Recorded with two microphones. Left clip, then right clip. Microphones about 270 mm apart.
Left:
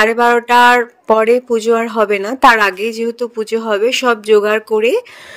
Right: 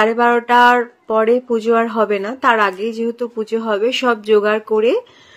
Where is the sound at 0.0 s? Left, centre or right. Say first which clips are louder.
Left 3 dB; left.